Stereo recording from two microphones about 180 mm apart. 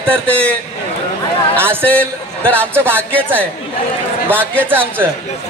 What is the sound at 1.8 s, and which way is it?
Speech, 10° left (ahead or behind).